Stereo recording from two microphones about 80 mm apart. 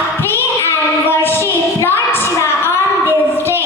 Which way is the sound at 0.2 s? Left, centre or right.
Left.